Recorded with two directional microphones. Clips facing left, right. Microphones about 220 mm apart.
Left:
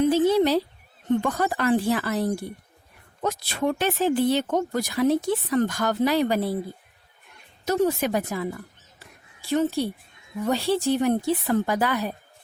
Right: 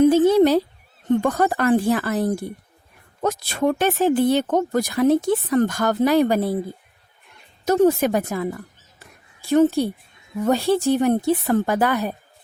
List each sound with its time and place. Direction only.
0.0 s a sound: 50° right (ahead or behind)
1.2 s speech: 45° right (ahead or behind)
7.6 s speech: 50° right (ahead or behind)